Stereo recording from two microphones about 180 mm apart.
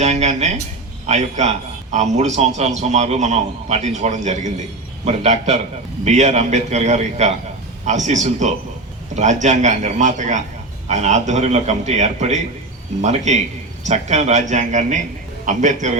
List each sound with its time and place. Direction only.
0.0 s a man's voice: 40° right (ahead or behind)